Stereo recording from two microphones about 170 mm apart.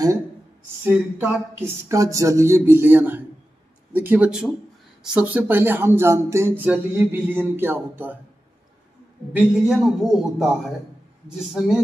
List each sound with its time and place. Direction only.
0.8 s speech: 10° right (ahead or behind)
9.3 s a man's voice: 5° right (ahead or behind)